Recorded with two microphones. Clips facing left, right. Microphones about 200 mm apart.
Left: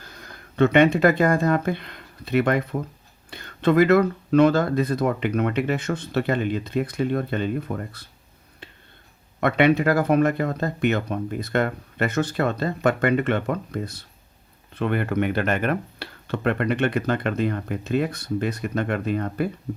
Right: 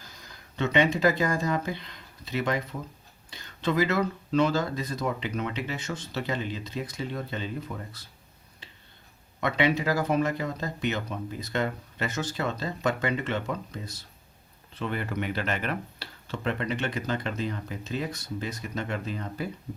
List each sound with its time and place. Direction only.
0.0 s speech: 60° left (ahead or behind)
8.6 s a sound: 55° left (ahead or behind)
9.4 s speech: 55° left (ahead or behind)